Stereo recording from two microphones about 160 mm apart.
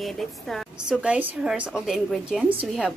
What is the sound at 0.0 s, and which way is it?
A woman's voice, centre (ahead or behind).